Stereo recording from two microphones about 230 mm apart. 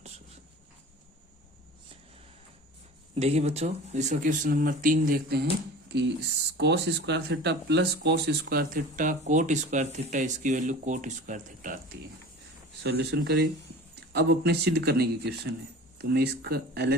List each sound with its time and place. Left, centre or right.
3.2 s speech: right
6.6 s speech: right
12.8 s speech: right